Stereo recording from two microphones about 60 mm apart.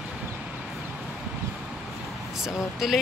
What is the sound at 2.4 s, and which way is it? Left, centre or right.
Speech, centre.